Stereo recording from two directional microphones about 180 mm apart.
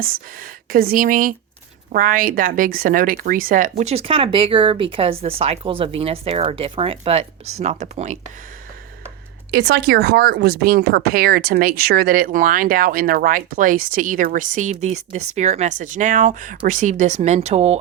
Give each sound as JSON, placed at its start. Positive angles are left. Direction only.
{"t": 0.3, "sound": "speech", "side_deg": -50}
{"t": 9.5, "sound": "speech", "side_deg": -65}